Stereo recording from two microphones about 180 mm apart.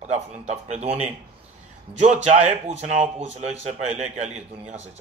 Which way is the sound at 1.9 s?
40° right (ahead or behind).